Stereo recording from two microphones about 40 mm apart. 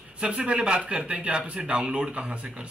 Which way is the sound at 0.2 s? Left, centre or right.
Right.